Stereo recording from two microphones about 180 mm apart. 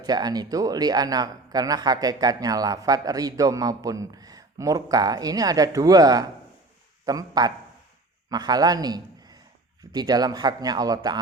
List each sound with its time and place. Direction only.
0.0 s a man's voice: 20° right (ahead or behind)